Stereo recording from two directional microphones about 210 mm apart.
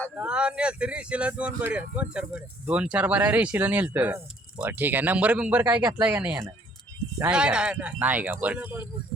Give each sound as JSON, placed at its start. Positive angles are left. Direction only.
{"t": 0.2, "sound": "speech", "side_deg": -5}